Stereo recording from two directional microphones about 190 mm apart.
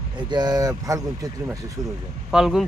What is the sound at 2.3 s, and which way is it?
Speech, 5° right (ahead or behind).